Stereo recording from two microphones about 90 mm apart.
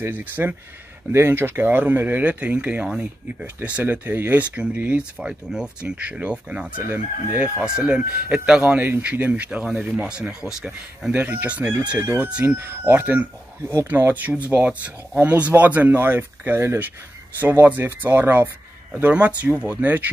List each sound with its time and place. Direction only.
0.0 s speech: 20° right (ahead or behind)
8.7 s speech: 20° right (ahead or behind)